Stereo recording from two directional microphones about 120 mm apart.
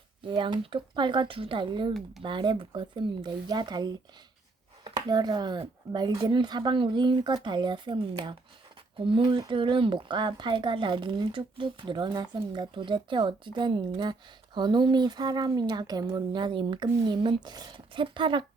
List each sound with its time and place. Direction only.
0.3 s speech: 45° right (ahead or behind)
4.9 s speech: 35° right (ahead or behind)